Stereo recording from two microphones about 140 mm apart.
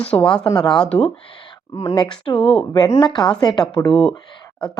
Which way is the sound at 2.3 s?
10° left (ahead or behind).